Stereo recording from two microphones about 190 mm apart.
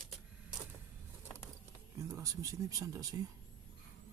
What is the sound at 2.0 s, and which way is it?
Speech, 15° right (ahead or behind).